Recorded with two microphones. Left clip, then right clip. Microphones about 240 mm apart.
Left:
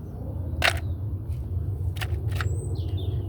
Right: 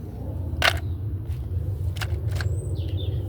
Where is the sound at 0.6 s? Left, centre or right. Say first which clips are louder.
Right 2 dB; centre.